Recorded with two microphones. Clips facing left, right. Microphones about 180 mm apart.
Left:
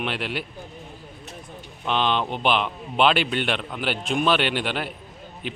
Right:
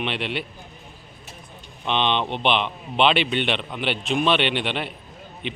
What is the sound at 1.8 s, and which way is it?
A man's voice, centre (ahead or behind).